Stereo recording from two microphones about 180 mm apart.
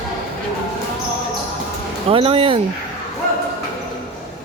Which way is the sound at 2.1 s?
30° right (ahead or behind).